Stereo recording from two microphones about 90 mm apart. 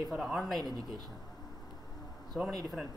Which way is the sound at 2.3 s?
Centre (ahead or behind).